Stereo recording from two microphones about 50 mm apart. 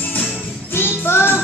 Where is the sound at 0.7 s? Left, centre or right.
Left.